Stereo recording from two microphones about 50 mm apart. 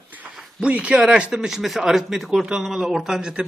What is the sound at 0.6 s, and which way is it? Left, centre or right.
A man's voice, right.